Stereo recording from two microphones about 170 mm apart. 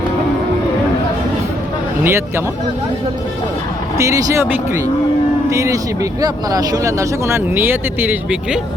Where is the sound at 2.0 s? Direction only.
15° right (ahead or behind).